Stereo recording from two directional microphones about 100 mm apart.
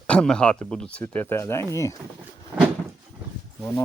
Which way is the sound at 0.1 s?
10° left (ahead or behind).